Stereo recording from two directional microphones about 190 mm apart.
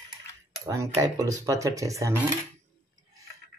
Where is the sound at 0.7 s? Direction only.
15° right (ahead or behind).